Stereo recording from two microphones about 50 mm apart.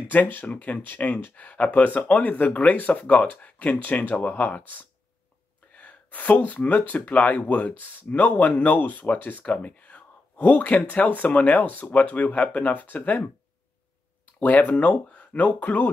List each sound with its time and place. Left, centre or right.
0.1 s speech: left
14.4 s speech: left